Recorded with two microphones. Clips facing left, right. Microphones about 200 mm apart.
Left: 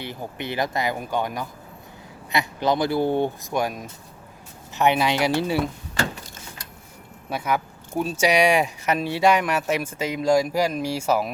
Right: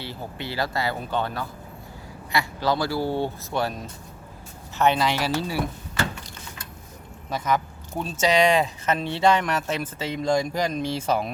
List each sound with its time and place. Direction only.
0.0 s speech: 20° left (ahead or behind)
7.3 s speech: 10° left (ahead or behind)